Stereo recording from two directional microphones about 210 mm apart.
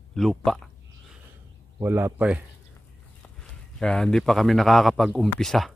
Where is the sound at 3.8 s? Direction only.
5° left (ahead or behind).